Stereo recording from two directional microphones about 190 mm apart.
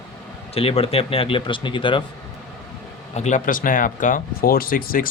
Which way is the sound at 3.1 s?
40° left (ahead or behind).